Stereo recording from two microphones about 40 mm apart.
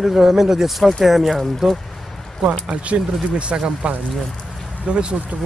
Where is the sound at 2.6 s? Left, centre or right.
Right.